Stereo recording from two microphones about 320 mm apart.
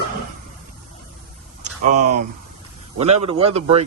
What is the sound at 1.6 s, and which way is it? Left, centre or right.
Speech, right.